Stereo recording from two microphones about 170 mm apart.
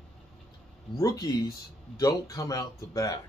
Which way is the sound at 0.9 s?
20° left (ahead or behind).